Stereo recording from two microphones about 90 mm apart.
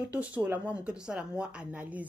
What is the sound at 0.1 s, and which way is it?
Speech, 15° right (ahead or behind).